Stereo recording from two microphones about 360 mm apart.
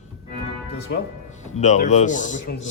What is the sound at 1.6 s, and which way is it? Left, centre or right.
Speech, centre.